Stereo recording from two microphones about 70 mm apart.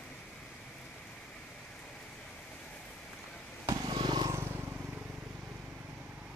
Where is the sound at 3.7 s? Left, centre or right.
Right.